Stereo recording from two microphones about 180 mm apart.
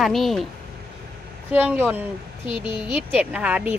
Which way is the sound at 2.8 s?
5° right (ahead or behind).